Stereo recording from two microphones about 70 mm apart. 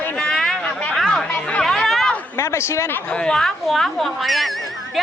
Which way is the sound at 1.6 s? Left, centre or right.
Centre.